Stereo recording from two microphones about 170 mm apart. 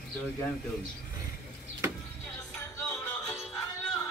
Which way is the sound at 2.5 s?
15° left (ahead or behind).